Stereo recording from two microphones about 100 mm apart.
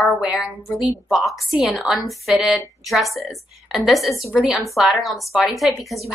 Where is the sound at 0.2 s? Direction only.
5° right (ahead or behind).